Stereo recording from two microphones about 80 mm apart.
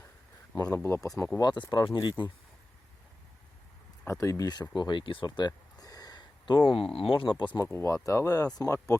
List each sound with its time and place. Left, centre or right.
0.7 s speech: left
1.4 s speech: left
1.7 s speech: left
4.0 s speech: left
4.7 s speech: left
5.8 s a sound: left
6.7 s speech: left
7.6 s speech: left